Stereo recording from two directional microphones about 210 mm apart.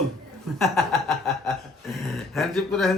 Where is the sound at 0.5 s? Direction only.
Centre (ahead or behind).